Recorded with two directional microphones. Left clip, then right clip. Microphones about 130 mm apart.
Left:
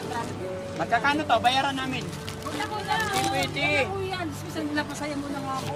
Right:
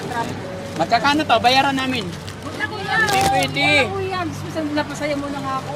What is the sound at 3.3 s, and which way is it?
Speech, 10° right (ahead or behind).